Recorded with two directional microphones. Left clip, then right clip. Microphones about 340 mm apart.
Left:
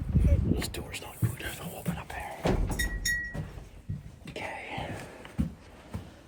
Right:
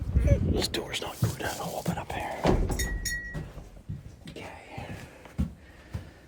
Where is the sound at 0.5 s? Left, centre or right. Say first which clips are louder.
Right 5 dB; right.